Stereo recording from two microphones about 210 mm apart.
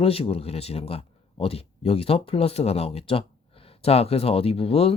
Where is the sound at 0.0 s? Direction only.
25° left (ahead or behind).